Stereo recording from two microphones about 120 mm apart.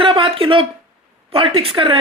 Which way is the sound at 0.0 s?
45° right (ahead or behind).